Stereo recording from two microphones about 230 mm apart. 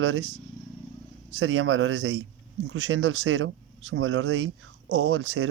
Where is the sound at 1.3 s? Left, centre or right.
Right.